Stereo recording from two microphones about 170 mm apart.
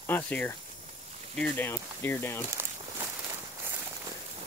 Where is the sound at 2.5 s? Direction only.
15° right (ahead or behind).